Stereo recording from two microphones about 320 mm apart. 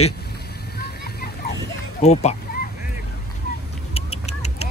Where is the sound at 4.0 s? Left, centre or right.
Centre.